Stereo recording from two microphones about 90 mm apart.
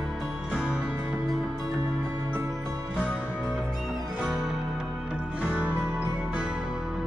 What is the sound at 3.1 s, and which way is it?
Music, 10° right (ahead or behind).